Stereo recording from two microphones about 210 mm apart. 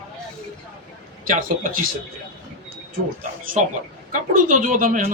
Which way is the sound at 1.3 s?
40° right (ahead or behind).